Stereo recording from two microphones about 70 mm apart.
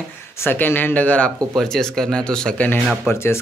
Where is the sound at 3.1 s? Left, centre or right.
Left.